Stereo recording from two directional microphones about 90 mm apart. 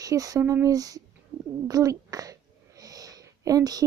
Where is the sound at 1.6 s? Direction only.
40° right (ahead or behind).